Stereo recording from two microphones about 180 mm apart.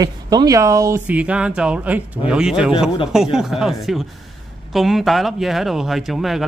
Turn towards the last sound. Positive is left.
turn(degrees=0)  # may be behind; listen again after turning